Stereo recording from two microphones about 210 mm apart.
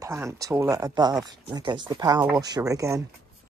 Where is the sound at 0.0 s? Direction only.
15° right (ahead or behind).